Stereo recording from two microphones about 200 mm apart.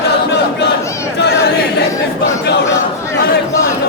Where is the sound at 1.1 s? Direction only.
55° left (ahead or behind).